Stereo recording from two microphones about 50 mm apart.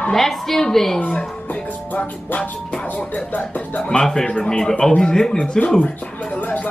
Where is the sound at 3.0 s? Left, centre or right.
Left.